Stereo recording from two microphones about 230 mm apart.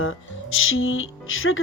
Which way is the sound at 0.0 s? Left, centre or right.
Left.